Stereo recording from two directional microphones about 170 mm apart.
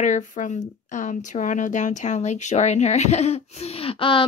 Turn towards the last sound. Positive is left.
turn(degrees=30)  # may be behind; listen again after turning